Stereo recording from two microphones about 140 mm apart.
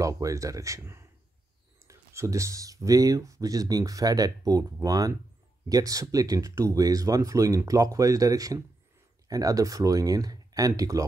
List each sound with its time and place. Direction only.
0.0 s speech: 25° right (ahead or behind)